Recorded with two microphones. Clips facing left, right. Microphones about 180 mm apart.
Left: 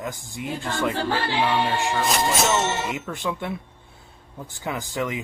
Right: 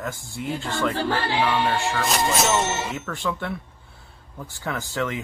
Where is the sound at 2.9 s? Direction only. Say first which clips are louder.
Even; 15° left (ahead or behind).